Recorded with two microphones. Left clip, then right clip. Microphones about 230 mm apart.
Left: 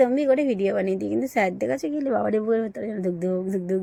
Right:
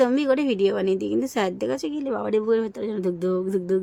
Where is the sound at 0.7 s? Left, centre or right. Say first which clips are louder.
Right 1 dB; right.